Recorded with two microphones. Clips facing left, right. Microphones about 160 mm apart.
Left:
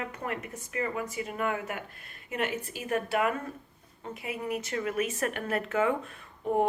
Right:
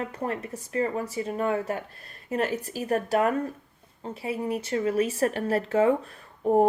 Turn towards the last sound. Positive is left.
turn(degrees=-35)  # may be behind; listen again after turning